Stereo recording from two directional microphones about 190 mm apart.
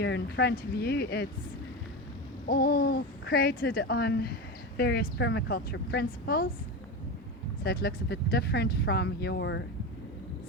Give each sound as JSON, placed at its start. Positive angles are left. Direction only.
{"t": 0.0, "sound": "speech", "side_deg": 60}
{"t": 2.5, "sound": "speech", "side_deg": 55}
{"t": 7.6, "sound": "speech", "side_deg": 55}